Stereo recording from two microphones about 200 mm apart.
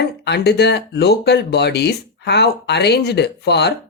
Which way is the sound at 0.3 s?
55° left (ahead or behind).